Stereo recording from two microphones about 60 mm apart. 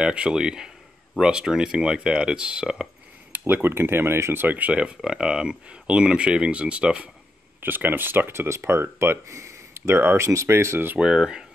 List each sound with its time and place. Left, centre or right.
0.0 s speech: centre
3.3 s speech: right
7.6 s speech: right
10.1 s speech: right
11.0 s speech: centre